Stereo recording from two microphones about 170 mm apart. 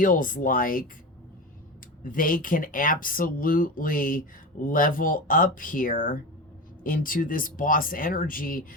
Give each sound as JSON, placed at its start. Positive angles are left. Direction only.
{"t": 0.0, "sound": "speech", "side_deg": 50}
{"t": 2.0, "sound": "speech", "side_deg": 55}